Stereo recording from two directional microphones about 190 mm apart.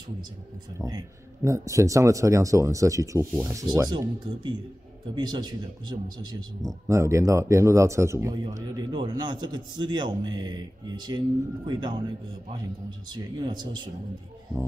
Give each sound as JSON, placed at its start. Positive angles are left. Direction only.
{"t": 0.7, "sound": "speech", "side_deg": -20}
{"t": 13.1, "sound": "speech", "side_deg": -20}